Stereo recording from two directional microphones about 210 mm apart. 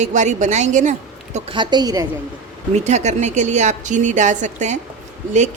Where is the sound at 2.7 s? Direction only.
35° right (ahead or behind).